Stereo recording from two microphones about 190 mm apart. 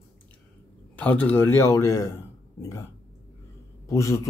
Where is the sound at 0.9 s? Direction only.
10° left (ahead or behind).